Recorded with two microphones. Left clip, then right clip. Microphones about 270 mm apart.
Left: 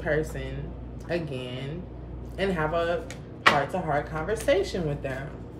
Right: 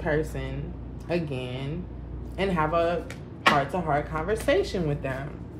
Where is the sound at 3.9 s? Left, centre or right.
Centre.